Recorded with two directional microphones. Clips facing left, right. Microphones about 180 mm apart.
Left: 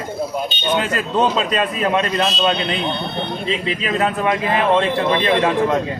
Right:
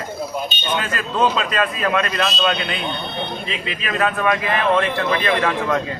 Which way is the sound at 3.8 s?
25° left (ahead or behind).